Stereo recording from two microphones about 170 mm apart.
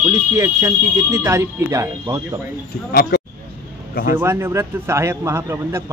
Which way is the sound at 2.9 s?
65° left (ahead or behind).